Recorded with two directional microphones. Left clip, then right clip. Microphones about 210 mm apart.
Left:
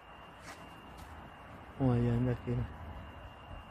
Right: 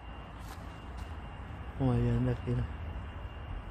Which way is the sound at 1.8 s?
15° left (ahead or behind).